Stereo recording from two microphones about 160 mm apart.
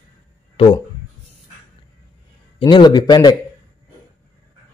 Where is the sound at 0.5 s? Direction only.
35° left (ahead or behind).